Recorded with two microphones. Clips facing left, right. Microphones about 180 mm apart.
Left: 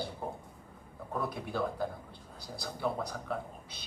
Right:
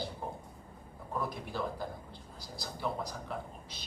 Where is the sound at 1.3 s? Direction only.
60° left (ahead or behind).